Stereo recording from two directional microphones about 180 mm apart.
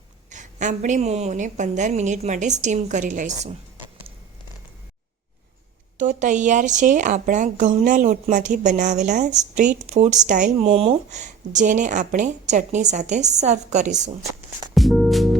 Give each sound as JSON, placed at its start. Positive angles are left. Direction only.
{"t": 0.3, "sound": "a woman's voice", "side_deg": -40}
{"t": 6.0, "sound": "a woman's voice", "side_deg": -45}
{"t": 14.8, "sound": "music", "side_deg": 0}